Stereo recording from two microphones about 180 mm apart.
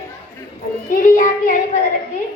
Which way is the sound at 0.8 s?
45° left (ahead or behind).